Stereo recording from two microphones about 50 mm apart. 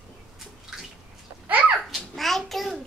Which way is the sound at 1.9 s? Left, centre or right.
Centre.